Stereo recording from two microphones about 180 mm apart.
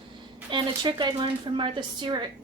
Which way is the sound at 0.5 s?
25° right (ahead or behind).